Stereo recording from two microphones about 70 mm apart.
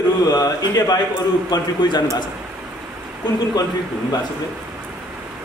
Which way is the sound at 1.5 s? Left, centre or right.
Left.